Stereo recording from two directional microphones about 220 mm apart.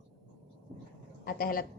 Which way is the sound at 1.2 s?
40° left (ahead or behind).